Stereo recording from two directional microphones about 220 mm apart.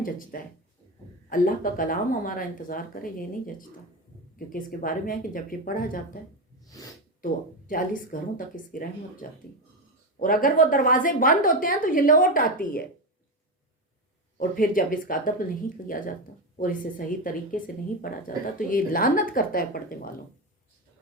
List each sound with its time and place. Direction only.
0.0 s a woman's voice: 40° left (ahead or behind)
6.7 s speech: 15° left (ahead or behind)
7.7 s a woman's voice: 40° left (ahead or behind)
14.3 s a woman's voice: 40° left (ahead or behind)
18.7 s a woman's voice: 40° left (ahead or behind)